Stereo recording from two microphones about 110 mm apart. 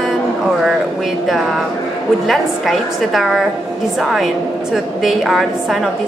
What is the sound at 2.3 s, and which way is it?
A woman's voice, centre (ahead or behind).